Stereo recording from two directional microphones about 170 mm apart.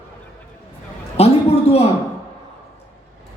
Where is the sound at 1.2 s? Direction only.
40° left (ahead or behind).